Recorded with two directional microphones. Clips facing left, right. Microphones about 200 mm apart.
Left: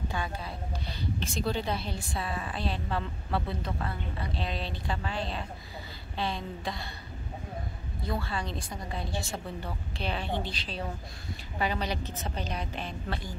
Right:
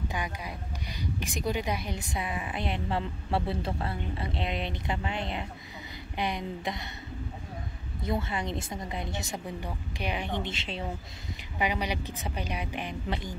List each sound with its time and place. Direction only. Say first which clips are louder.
1.2 s a woman's voice: right 1 dB; 15° right (ahead or behind)
8.0 s a woman's voice: right 3 dB; 20° right (ahead or behind)